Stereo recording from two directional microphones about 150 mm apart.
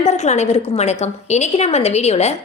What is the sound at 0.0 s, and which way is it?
A woman's voice, 50° left (ahead or behind).